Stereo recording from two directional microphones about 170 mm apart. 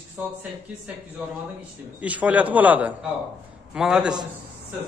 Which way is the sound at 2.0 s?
10° right (ahead or behind).